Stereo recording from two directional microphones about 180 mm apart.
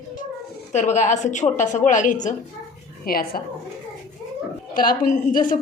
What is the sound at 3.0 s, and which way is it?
Speech, 55° left (ahead or behind).